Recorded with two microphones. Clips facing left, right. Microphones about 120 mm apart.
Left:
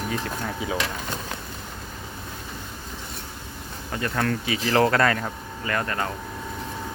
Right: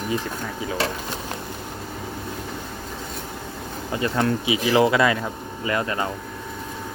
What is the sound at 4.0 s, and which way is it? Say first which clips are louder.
Speech: right 3 dB; 20° right (ahead or behind).